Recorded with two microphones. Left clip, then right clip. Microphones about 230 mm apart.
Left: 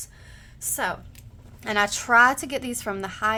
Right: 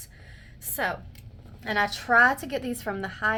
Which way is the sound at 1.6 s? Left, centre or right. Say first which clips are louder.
Left 3 dB; left.